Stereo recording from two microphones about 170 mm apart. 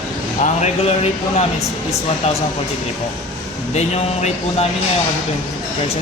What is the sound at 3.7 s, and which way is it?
Speech, 40° left (ahead or behind).